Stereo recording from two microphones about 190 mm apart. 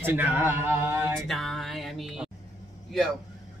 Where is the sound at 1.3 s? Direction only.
Centre (ahead or behind).